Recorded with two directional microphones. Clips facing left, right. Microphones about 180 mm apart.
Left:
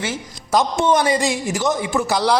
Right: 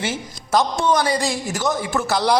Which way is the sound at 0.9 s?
25° left (ahead or behind).